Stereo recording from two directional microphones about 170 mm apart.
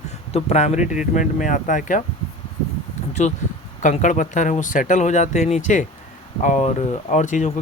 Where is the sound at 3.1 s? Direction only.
45° left (ahead or behind).